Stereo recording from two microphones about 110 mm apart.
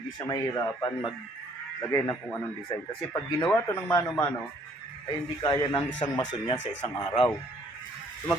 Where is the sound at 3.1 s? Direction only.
25° left (ahead or behind).